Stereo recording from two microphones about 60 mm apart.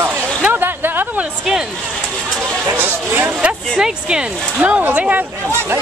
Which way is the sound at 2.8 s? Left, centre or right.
Right.